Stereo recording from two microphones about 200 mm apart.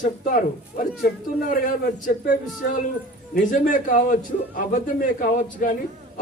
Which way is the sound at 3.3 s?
40° left (ahead or behind).